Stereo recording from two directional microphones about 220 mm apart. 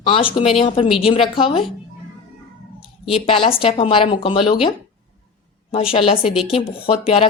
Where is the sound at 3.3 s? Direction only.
25° left (ahead or behind).